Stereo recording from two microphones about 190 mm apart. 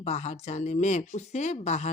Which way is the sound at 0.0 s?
35° left (ahead or behind).